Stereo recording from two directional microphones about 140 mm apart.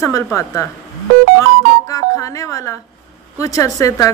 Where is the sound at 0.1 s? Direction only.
20° left (ahead or behind).